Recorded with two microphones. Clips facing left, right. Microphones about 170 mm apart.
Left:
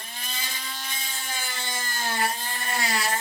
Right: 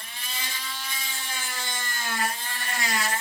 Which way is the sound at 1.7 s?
30° left (ahead or behind).